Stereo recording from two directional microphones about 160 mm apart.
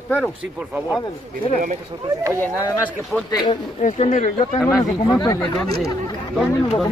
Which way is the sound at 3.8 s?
45° left (ahead or behind).